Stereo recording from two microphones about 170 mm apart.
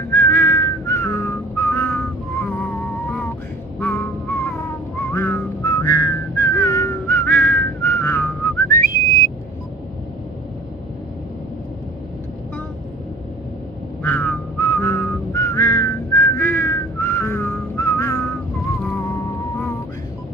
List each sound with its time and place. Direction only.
0.1 s whistling: 10° left (ahead or behind)
3.8 s a sound: 10° left (ahead or behind)
5.1 s whistling: 15° left (ahead or behind)
14.0 s whistling: 10° left (ahead or behind)